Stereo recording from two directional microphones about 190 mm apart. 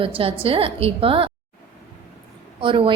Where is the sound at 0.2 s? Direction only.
30° right (ahead or behind).